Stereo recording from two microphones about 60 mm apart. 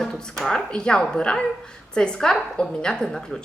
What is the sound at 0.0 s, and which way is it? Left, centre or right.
A woman's voice, centre.